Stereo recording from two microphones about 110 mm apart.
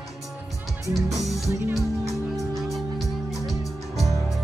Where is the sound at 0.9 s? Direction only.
Centre (ahead or behind).